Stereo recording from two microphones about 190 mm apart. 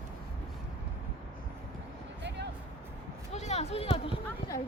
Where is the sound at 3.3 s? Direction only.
35° left (ahead or behind).